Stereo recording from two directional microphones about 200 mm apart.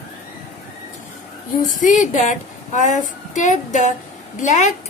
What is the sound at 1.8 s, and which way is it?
A woman's voice, 40° left (ahead or behind).